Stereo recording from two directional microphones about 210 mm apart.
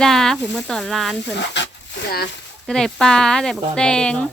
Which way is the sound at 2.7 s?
Centre (ahead or behind).